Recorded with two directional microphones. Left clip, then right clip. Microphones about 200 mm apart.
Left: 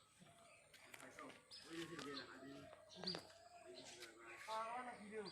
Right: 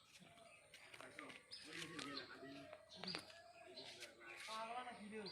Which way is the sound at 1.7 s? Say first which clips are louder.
Even; 30° left (ahead or behind).